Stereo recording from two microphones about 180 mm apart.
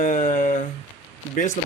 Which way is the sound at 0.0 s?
45° left (ahead or behind).